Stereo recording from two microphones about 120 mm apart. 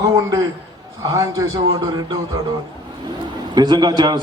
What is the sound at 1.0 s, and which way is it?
Speech, 30° right (ahead or behind).